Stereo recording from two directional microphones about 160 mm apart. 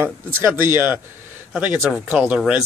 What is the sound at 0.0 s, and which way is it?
Speech, 15° right (ahead or behind).